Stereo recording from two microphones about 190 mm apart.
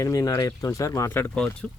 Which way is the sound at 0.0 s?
15° left (ahead or behind).